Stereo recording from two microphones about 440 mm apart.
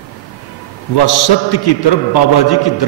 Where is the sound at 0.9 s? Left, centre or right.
Left.